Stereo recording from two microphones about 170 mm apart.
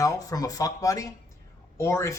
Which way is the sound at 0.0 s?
20° left (ahead or behind).